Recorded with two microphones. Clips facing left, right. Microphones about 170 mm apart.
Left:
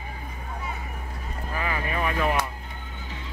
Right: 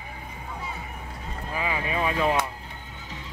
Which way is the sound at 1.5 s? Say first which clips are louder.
Right 1 dB; 15° right (ahead or behind).